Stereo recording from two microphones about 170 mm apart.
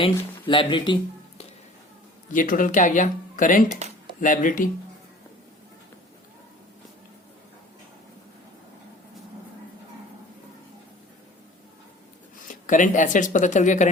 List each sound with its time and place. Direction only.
0.0 s speech: 30° left (ahead or behind)
2.3 s speech: 50° left (ahead or behind)
12.5 s speech: 50° left (ahead or behind)